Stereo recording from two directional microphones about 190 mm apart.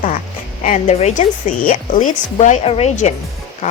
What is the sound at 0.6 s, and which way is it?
Speech, 40° left (ahead or behind).